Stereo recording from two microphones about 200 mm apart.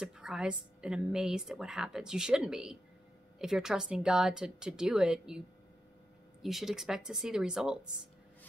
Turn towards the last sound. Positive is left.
turn(degrees=-5)  # may be behind; listen again after turning